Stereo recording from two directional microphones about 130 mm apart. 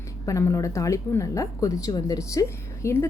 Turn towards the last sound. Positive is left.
turn(degrees=20)  # may be behind; listen again after turning